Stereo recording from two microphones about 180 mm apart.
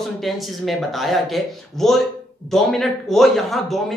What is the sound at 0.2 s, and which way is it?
Speech, centre (ahead or behind).